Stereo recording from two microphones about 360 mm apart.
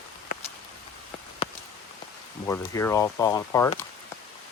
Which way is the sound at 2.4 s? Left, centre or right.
Centre.